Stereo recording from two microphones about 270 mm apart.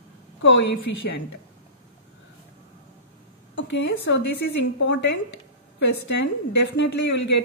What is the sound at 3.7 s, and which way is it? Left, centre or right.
A woman's voice, left.